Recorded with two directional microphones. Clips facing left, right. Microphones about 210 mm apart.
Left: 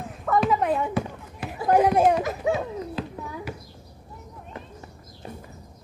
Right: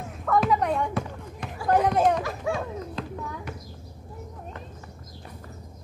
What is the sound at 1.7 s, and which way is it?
Speech, 10° left (ahead or behind).